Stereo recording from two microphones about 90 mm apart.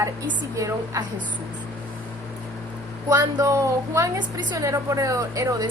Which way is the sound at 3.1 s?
40° right (ahead or behind).